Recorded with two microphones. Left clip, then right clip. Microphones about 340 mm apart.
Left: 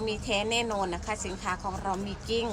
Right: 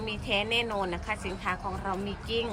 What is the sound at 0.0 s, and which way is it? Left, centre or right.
A woman's voice, centre.